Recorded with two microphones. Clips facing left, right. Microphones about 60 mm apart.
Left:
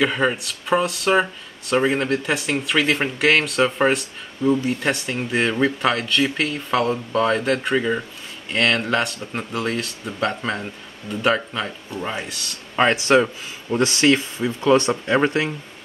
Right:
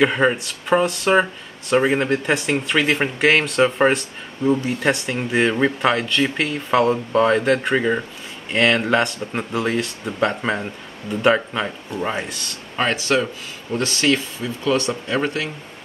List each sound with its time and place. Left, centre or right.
0.0 s speech: centre
12.3 s speech: centre
12.9 s speech: left